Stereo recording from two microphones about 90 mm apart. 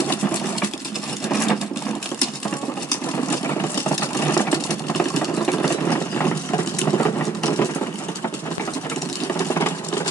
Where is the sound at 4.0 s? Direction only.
30° left (ahead or behind).